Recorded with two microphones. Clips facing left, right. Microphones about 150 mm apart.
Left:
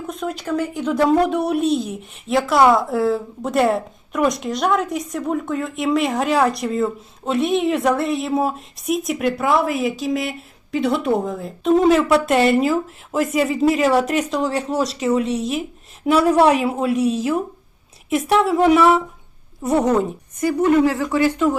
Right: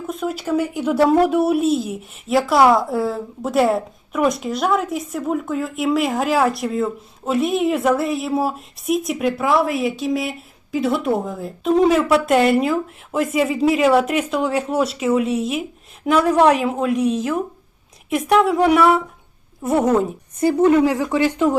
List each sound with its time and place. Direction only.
0.1 s a woman's voice: 5° right (ahead or behind)
16.1 s a woman's voice: 10° left (ahead or behind)
16.9 s speech: 35° left (ahead or behind)
18.1 s a woman's voice: centre (ahead or behind)
20.4 s speech: 25° right (ahead or behind)